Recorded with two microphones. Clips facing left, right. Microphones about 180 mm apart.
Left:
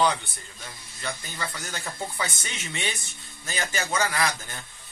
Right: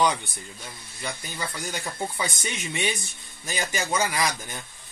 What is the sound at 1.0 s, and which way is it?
Speech, 15° right (ahead or behind).